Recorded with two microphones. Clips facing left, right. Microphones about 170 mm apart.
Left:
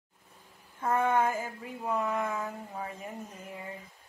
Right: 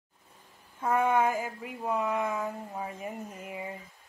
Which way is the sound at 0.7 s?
5° right (ahead or behind).